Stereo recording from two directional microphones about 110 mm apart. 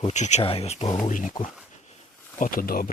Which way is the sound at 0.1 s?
90° left.